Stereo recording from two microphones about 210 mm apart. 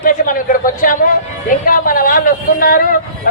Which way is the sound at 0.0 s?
40° left (ahead or behind).